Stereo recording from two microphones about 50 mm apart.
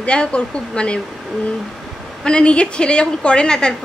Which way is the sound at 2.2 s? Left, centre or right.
Centre.